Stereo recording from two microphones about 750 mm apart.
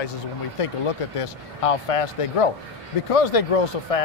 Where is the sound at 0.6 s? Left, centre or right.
Left.